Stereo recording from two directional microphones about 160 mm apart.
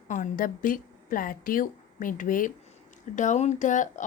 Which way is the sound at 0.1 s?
60° left (ahead or behind).